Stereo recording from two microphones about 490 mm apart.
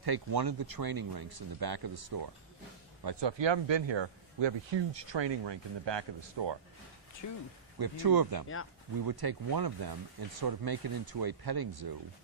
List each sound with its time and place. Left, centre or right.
0.0 s speech: right
7.2 s speech: left
7.8 s speech: right